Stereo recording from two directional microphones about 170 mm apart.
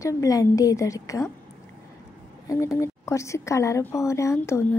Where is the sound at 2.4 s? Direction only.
20° left (ahead or behind).